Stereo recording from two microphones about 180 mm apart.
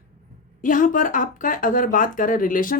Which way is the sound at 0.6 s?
50° left (ahead or behind).